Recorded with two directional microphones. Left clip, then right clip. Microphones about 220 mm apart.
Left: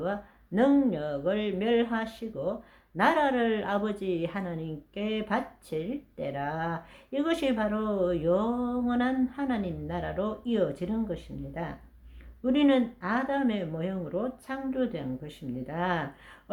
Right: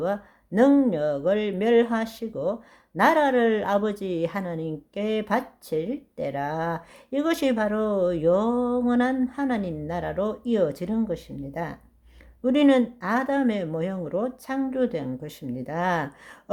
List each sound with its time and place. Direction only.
0.0 s speech: 40° right (ahead or behind)